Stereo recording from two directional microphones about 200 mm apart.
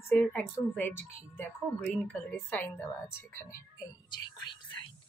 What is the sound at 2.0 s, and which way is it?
A woman's voice, 5° left (ahead or behind).